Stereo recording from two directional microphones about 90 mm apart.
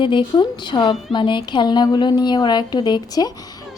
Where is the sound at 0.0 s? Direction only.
65° left (ahead or behind).